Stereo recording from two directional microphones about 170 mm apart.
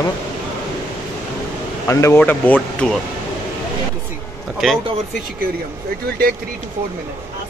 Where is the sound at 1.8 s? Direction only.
15° left (ahead or behind).